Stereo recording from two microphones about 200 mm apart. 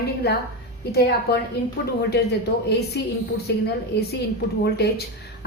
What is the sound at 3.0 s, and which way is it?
Speech, 60° left (ahead or behind).